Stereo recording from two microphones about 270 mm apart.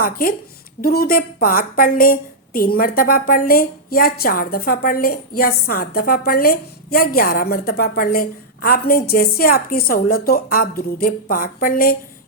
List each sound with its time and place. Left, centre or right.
0.0 s a woman's voice: left